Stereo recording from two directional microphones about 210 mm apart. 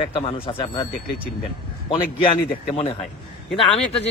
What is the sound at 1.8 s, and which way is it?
A man's voice, 25° left (ahead or behind).